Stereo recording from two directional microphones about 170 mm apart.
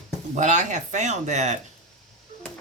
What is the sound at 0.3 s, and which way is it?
Speech, 45° right (ahead or behind).